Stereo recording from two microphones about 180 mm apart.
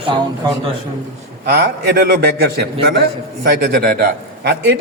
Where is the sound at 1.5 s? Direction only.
60° right (ahead or behind).